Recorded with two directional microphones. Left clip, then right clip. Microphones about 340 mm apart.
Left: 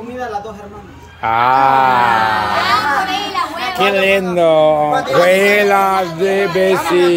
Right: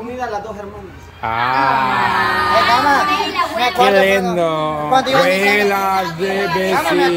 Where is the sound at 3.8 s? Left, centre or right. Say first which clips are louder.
Even; centre.